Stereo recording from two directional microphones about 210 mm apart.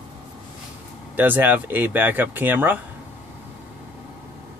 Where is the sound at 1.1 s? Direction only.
10° right (ahead or behind).